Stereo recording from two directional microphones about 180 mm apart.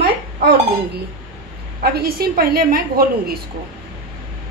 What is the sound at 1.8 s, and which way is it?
A woman's voice, 55° right (ahead or behind).